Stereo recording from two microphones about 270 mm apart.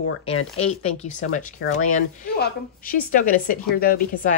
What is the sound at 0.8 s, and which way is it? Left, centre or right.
A woman's voice, left.